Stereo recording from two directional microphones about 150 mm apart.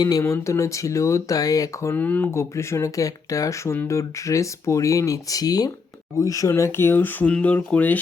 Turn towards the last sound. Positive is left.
turn(degrees=10)  # may be behind; listen again after turning